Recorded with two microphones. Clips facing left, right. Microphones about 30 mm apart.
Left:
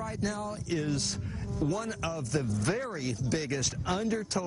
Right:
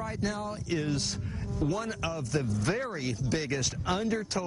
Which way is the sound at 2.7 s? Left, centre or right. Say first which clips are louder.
Right 1 dB; right.